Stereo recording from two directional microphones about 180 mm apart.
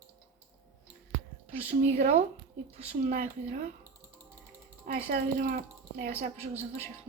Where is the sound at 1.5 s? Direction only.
35° right (ahead or behind).